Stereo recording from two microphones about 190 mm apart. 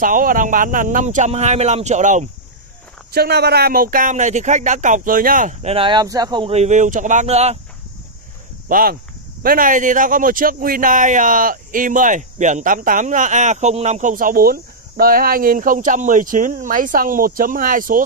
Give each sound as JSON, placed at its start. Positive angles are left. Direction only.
{"t": 0.0, "sound": "speech", "side_deg": -45}
{"t": 3.1, "sound": "speech", "side_deg": -60}
{"t": 6.5, "sound": "speech", "side_deg": -40}
{"t": 8.6, "sound": "speech", "side_deg": -50}